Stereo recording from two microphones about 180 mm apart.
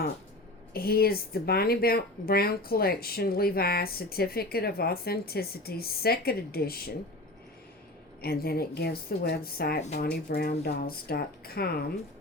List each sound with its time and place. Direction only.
0.7 s speech: 60° left (ahead or behind)
8.2 s speech: 60° left (ahead or behind)